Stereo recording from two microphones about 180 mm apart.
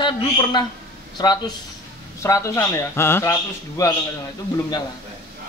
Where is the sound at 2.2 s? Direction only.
15° left (ahead or behind).